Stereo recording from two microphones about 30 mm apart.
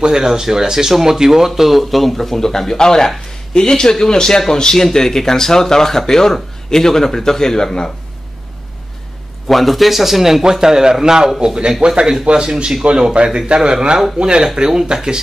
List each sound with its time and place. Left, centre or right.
0.0 s a man's voice: centre
1.5 s a man's voice: centre; by 7.9 s left
9.5 s a man's voice: centre
10.5 s a man's voice: centre